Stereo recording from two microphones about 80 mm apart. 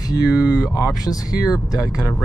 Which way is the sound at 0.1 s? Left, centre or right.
Left.